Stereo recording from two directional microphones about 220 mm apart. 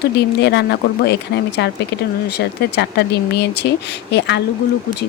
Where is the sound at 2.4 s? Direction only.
50° left (ahead or behind).